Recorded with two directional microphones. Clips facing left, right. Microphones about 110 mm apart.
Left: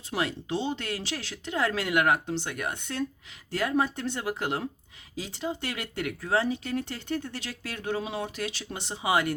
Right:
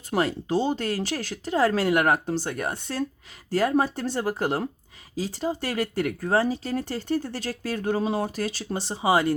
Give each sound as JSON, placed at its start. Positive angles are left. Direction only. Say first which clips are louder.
{"t": 0.1, "sound": "speech", "louder": "right 6 dB", "side_deg": -40}